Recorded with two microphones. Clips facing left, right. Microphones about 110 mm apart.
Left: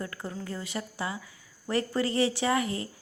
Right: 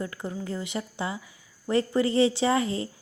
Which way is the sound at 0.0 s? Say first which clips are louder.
Right 3 dB; 20° right (ahead or behind).